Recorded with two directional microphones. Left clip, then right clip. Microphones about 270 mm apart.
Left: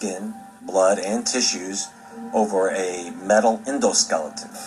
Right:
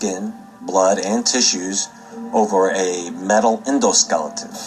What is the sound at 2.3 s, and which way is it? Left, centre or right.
Speech, right.